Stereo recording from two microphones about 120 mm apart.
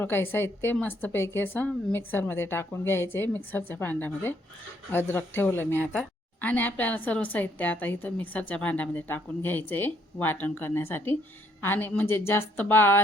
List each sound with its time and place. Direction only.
0.0 s a woman's voice: 15° left (ahead or behind)